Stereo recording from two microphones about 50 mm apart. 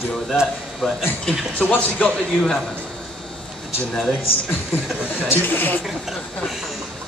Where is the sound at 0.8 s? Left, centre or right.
Centre.